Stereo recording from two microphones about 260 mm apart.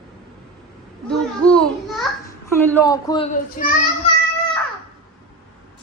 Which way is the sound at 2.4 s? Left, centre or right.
Centre.